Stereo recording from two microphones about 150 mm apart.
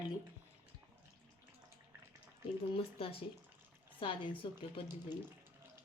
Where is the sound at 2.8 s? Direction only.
40° left (ahead or behind).